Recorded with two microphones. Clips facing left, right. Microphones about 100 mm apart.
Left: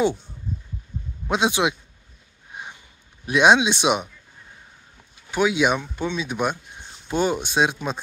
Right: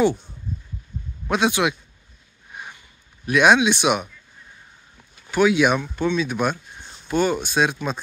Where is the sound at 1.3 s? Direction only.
20° left (ahead or behind).